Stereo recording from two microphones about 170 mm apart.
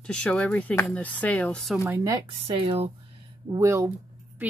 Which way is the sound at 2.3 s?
30° right (ahead or behind).